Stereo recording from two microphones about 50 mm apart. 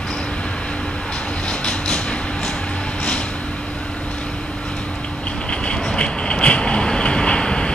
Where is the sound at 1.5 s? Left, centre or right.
Centre.